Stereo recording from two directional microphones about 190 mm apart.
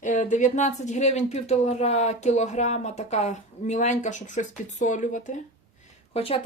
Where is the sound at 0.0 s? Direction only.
40° left (ahead or behind).